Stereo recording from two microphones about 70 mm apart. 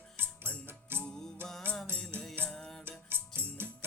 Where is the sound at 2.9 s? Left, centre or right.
Right.